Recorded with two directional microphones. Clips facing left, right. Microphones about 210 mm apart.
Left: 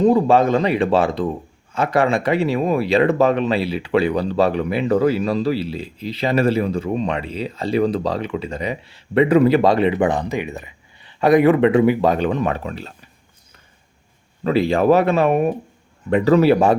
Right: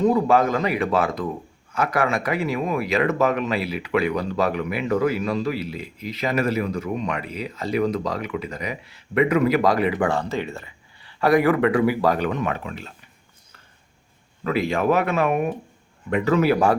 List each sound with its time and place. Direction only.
0.0 s speech: 30° left (ahead or behind)
14.4 s speech: 30° left (ahead or behind)